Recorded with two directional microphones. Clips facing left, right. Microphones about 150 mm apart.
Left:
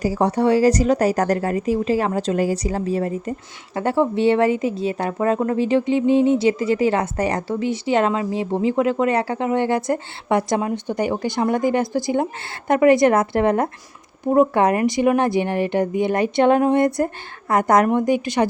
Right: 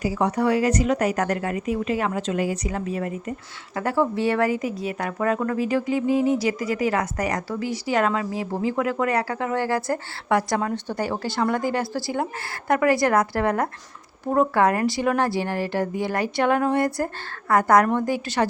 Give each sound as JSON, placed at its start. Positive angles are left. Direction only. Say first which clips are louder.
{"t": 0.0, "sound": "a woman's voice", "louder": "left 4 dB", "side_deg": 35}